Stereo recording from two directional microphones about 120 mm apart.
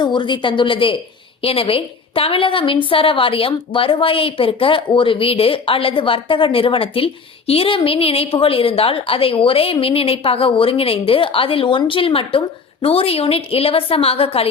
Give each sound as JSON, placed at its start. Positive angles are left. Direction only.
{"t": 0.0, "sound": "a woman's voice", "side_deg": 40}